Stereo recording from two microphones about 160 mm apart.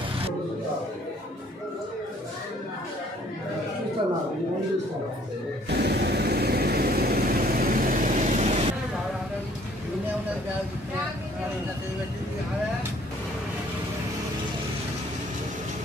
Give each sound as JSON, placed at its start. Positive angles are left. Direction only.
{"t": 5.7, "sound": "vehicle", "side_deg": -90}